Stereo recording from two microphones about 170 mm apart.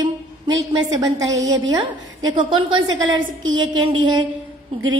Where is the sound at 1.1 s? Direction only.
20° right (ahead or behind).